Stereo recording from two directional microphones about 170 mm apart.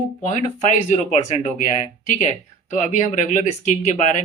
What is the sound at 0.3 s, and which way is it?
Speech, 45° left (ahead or behind).